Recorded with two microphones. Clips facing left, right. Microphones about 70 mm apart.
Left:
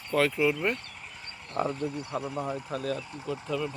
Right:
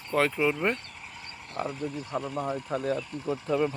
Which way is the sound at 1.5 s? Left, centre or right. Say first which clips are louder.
Left 3 dB; centre.